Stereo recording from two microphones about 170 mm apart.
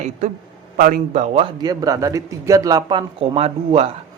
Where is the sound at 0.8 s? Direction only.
55° right (ahead or behind); by 1.5 s 35° right (ahead or behind).